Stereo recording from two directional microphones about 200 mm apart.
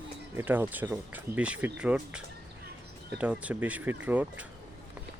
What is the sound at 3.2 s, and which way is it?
Speech, 5° right (ahead or behind).